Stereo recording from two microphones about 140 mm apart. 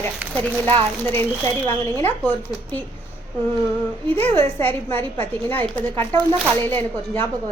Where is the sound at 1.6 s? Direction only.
15° left (ahead or behind).